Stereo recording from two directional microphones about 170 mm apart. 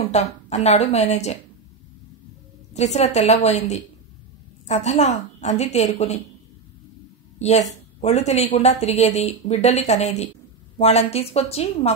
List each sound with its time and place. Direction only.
0.1 s a woman's voice: 40° left (ahead or behind)
2.7 s a woman's voice: 40° left (ahead or behind)
7.3 s a woman's voice: 40° left (ahead or behind)